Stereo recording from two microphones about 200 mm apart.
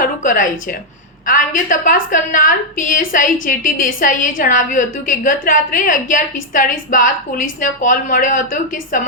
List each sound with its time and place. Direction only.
0.0 s a woman's voice: 40° left (ahead or behind)